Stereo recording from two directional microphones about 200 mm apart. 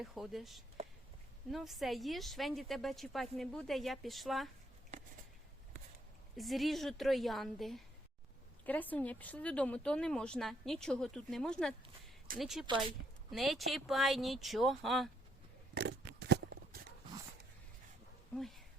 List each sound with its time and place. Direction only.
0.0 s speech: centre (ahead or behind)
6.3 s speech: centre (ahead or behind)
15.7 s a sound: 55° right (ahead or behind)
18.3 s a woman's voice: centre (ahead or behind)